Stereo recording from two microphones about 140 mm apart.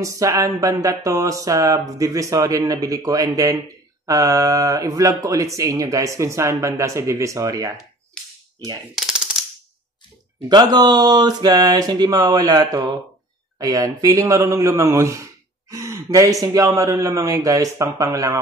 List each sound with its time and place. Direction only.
0.0 s speech: 20° right (ahead or behind)
8.2 s a sound: 5° left (ahead or behind)
8.9 s machine gun: 5° right (ahead or behind)
10.5 s speech: 30° right (ahead or behind)